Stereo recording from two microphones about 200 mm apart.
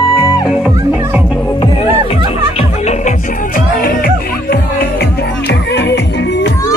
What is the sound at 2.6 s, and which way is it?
Music, 35° left (ahead or behind).